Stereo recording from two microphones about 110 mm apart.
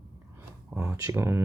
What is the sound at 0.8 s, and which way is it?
Speech, 30° right (ahead or behind).